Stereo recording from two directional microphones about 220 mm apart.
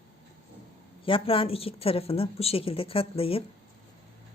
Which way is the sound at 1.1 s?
25° left (ahead or behind).